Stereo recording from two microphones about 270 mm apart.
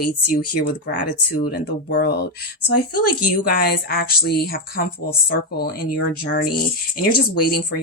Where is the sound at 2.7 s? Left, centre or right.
Left.